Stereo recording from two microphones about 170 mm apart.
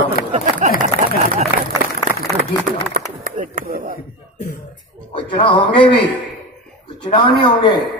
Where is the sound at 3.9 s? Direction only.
55° left (ahead or behind).